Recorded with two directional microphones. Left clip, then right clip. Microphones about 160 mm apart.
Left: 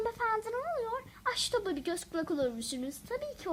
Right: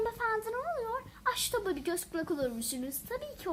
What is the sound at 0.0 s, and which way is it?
A woman's voice, 40° left (ahead or behind).